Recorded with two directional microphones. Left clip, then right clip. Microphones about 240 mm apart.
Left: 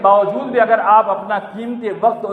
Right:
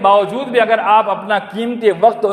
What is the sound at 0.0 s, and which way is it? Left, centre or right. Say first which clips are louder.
A man's voice: even; right.